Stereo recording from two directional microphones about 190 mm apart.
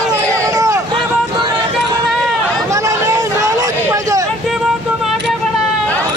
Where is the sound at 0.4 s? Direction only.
15° right (ahead or behind).